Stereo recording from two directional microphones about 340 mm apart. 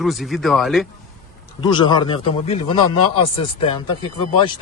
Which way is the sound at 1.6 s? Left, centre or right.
Centre.